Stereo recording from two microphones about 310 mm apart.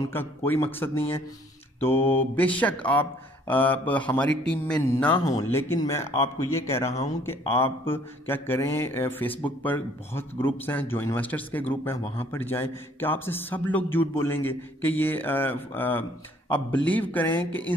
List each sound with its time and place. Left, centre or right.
0.0 s a man's voice: centre
0.9 s speech: centre
2.0 s a man's voice: centre